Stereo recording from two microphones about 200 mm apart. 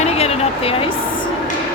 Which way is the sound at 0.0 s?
30° left (ahead or behind).